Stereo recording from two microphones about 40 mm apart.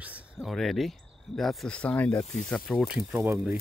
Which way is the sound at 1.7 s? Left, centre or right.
Left.